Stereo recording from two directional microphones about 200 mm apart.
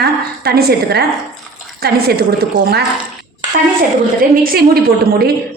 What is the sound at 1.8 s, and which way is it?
A woman's voice, 50° right (ahead or behind).